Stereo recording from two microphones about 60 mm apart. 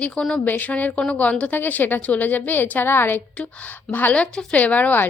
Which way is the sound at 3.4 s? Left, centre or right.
Left.